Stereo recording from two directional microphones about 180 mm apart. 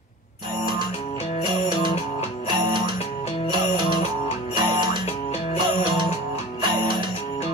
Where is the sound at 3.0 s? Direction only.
35° left (ahead or behind).